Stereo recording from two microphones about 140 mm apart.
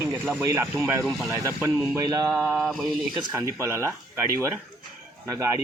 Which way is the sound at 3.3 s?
15° right (ahead or behind).